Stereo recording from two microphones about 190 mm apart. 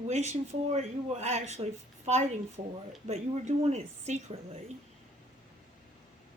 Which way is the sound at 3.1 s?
35° right (ahead or behind).